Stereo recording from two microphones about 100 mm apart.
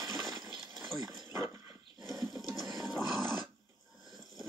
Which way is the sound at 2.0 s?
Centre (ahead or behind).